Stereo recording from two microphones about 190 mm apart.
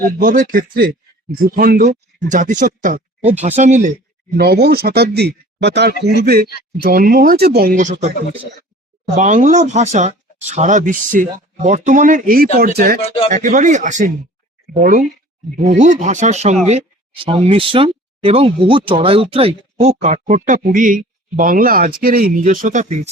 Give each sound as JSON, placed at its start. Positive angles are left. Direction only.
{"t": 0.2, "sound": "speech", "side_deg": -45}
{"t": 4.4, "sound": "speech", "side_deg": -55}
{"t": 19.8, "sound": "speech", "side_deg": -40}